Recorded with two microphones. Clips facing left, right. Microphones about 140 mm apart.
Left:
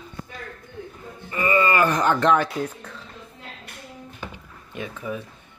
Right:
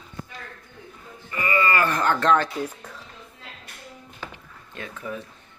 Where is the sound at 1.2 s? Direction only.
25° left (ahead or behind).